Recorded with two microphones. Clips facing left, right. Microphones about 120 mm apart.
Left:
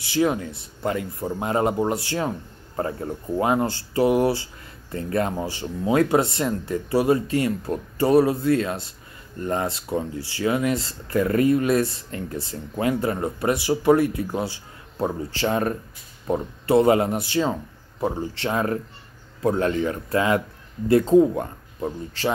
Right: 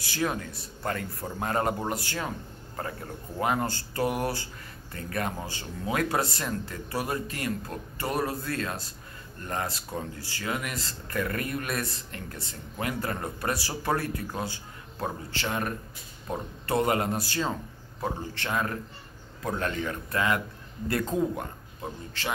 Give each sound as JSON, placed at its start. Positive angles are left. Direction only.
{"t": 0.0, "sound": "speech", "side_deg": 20}